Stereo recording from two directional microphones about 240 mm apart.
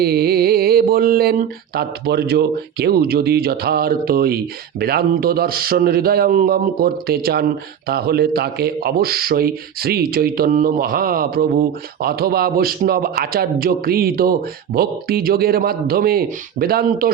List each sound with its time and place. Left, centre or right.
0.0 s a man's voice: right